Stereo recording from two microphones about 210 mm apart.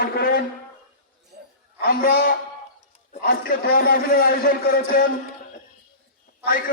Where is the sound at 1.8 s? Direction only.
45° left (ahead or behind).